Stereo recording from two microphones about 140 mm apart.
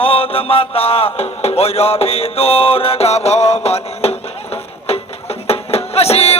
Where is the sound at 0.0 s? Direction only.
40° left (ahead or behind).